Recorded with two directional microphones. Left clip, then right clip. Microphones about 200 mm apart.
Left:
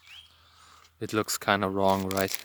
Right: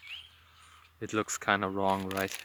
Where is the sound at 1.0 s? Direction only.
65° left (ahead or behind).